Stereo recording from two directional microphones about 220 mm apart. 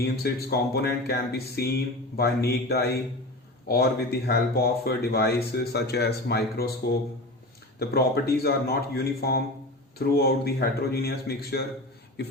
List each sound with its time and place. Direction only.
0.0 s speech: 45° left (ahead or behind)
7.8 s speech: 45° left (ahead or behind)